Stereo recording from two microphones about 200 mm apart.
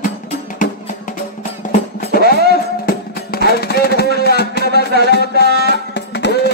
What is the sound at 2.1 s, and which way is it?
Music, 50° left (ahead or behind).